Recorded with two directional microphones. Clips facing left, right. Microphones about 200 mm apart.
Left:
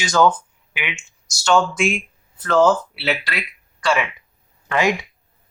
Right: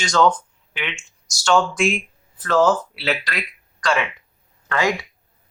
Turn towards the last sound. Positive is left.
turn(degrees=15)  # may be behind; listen again after turning